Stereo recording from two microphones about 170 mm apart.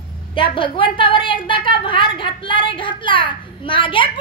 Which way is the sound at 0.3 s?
30° left (ahead or behind).